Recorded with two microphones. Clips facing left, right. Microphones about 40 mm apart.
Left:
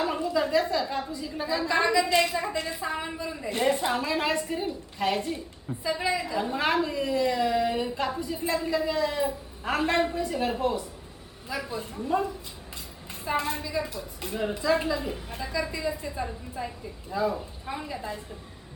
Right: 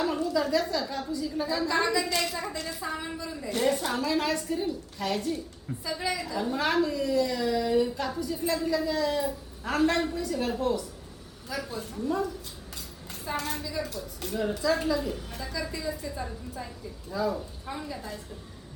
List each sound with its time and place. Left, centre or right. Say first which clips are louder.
0.0 s a woman's voice: left 1 dB; left